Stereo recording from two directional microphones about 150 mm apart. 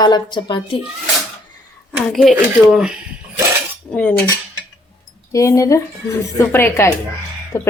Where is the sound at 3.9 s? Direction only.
10° left (ahead or behind).